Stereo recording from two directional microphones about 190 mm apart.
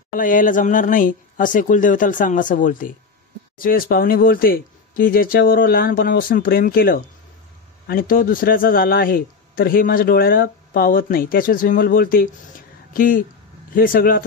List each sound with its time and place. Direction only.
0.1 s speech: 45° left (ahead or behind)